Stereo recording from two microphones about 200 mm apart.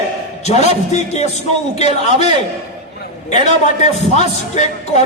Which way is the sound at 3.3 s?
35° left (ahead or behind).